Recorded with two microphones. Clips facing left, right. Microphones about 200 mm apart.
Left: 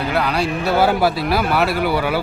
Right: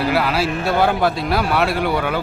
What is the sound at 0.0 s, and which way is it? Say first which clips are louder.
Speech: right 1 dB; 5° right (ahead or behind).